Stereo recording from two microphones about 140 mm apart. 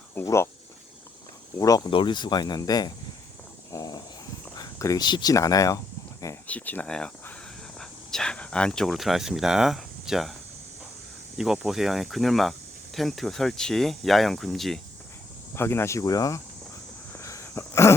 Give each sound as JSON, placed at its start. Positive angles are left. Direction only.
{"t": 0.1, "sound": "speech", "side_deg": 15}
{"t": 1.5, "sound": "speech", "side_deg": 25}
{"t": 1.9, "sound": "speech", "side_deg": 35}
{"t": 3.7, "sound": "a sound", "side_deg": 25}
{"t": 4.5, "sound": "speech", "side_deg": 25}
{"t": 6.5, "sound": "speech", "side_deg": 10}
{"t": 11.3, "sound": "speech", "side_deg": -5}
{"t": 15.5, "sound": "speech", "side_deg": 15}
{"t": 17.2, "sound": "a sound", "side_deg": 20}